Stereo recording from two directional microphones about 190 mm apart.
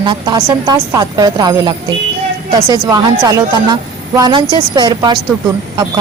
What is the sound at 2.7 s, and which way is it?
Speech, 20° right (ahead or behind).